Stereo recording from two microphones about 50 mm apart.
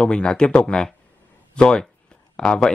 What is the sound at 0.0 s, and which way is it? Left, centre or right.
Speech, centre.